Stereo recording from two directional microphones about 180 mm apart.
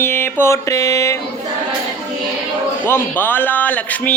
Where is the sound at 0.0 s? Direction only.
10° left (ahead or behind).